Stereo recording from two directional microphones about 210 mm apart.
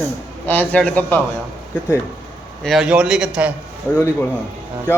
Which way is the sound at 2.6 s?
Centre (ahead or behind).